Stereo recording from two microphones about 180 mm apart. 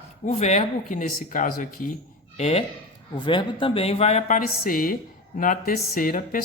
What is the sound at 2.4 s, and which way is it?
A man's voice, 35° left (ahead or behind).